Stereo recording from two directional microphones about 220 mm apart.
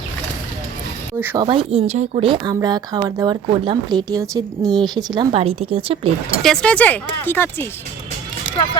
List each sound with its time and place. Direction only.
1.2 s speech: 10° right (ahead or behind)
1.5 s a woman's voice: 25° right (ahead or behind)
6.4 s speech: 5° left (ahead or behind)